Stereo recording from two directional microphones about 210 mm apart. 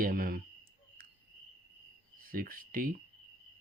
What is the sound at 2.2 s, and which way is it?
Speech, 40° right (ahead or behind).